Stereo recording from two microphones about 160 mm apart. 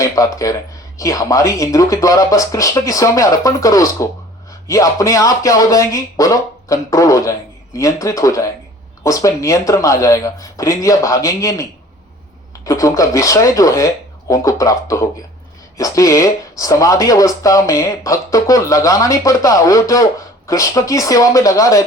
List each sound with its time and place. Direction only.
0.0 s speech: 20° left (ahead or behind)
12.6 s speech: 20° left (ahead or behind)